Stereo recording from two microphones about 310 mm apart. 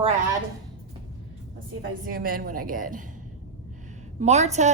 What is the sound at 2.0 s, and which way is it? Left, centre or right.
Speech, right.